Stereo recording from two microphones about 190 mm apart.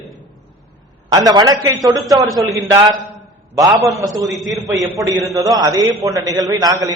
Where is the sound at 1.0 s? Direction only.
20° right (ahead or behind).